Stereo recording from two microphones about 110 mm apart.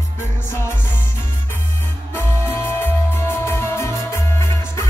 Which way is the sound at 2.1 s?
20° left (ahead or behind).